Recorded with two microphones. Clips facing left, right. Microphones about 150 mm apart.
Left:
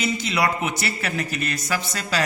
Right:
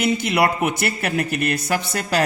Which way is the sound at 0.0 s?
55° right (ahead or behind).